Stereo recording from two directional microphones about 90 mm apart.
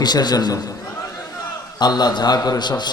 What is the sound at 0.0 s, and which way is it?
Speech, 50° left (ahead or behind).